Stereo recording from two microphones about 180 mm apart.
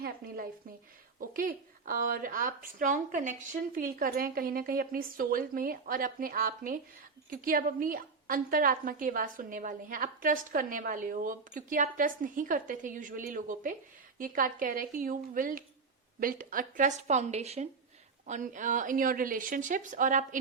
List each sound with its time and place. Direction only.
1.2 s a woman's voice: 50° right (ahead or behind)